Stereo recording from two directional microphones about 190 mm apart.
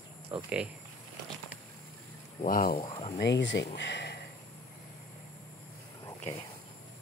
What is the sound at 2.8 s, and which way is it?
Speech, 35° left (ahead or behind).